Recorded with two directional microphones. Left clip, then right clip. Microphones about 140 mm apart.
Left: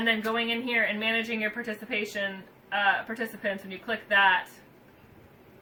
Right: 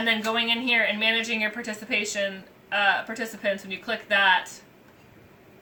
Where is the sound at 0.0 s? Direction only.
40° right (ahead or behind).